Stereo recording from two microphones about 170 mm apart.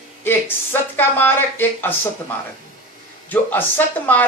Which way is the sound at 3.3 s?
10° left (ahead or behind).